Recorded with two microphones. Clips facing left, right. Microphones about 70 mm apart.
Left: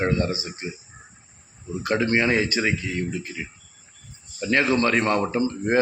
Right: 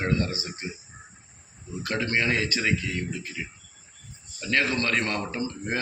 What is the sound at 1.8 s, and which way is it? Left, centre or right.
Speech, centre.